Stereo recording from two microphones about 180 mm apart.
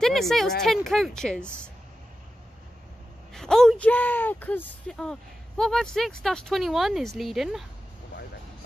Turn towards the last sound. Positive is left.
turn(degrees=0)  # may be behind; listen again after turning